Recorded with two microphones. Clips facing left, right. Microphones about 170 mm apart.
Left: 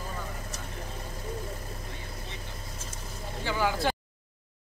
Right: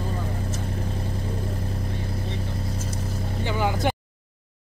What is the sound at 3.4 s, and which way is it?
Vehicle, 20° right (ahead or behind).